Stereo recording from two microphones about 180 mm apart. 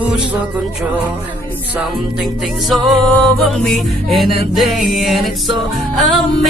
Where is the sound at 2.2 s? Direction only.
Centre (ahead or behind).